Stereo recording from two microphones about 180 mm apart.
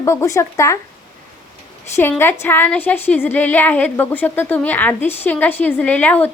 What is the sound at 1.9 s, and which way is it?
A woman's voice, 10° left (ahead or behind).